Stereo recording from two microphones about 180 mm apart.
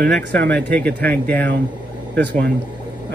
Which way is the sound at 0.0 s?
65° right (ahead or behind).